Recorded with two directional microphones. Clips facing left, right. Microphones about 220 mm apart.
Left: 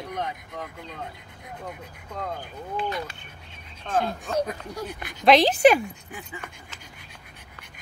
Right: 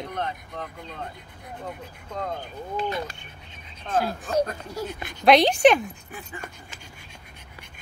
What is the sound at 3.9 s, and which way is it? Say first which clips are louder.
Speech: right 1 dB; centre (ahead or behind).